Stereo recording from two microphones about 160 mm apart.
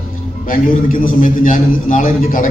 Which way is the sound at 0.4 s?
60° left (ahead or behind).